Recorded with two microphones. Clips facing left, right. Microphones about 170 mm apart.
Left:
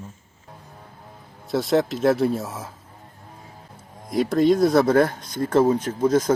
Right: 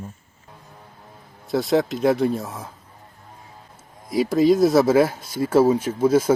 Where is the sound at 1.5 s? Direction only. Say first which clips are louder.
Right 1 dB; centre (ahead or behind).